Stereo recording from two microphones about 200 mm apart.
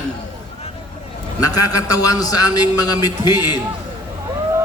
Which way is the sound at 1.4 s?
20° left (ahead or behind).